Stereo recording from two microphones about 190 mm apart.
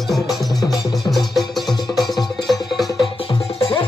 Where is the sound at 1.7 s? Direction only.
20° left (ahead or behind).